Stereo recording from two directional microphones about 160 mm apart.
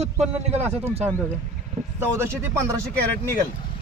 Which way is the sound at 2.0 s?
15° right (ahead or behind).